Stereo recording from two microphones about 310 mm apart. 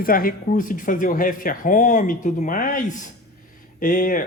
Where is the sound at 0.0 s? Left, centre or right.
Left.